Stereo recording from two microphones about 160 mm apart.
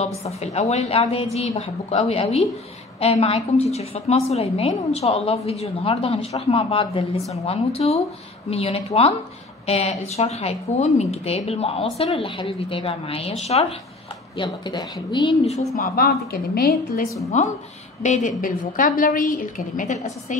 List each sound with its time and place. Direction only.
0.2 s a woman's voice: 40° left (ahead or behind)
14.3 s speech: 30° left (ahead or behind)
15.4 s a woman's voice: 45° left (ahead or behind)
15.8 s a woman's voice: 70° left (ahead or behind)
17.3 s a woman's voice: 50° left (ahead or behind)